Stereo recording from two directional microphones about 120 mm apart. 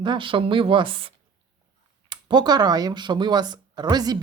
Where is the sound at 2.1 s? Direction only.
40° right (ahead or behind).